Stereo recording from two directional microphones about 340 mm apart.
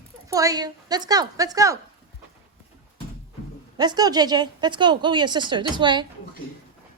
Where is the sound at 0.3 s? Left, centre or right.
Centre.